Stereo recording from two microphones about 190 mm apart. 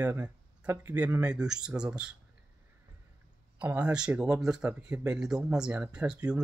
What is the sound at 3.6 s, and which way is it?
Speech, 5° right (ahead or behind).